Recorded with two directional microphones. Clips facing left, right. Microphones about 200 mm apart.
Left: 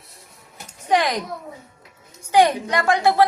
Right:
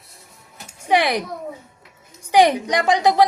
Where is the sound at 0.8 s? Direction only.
10° right (ahead or behind).